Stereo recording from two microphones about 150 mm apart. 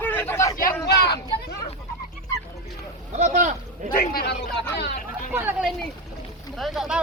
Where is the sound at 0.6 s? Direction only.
90° left.